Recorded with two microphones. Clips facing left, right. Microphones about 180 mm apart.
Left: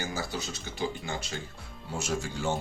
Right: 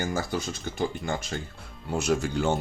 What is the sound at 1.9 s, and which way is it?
Speech, 65° right (ahead or behind).